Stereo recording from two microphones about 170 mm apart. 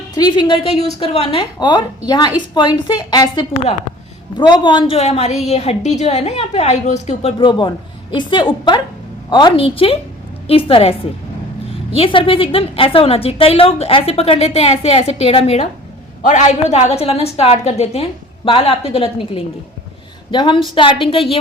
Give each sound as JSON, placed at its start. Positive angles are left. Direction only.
{"t": 0.2, "sound": "a woman's voice", "side_deg": 25}
{"t": 11.9, "sound": "a woman's voice", "side_deg": 30}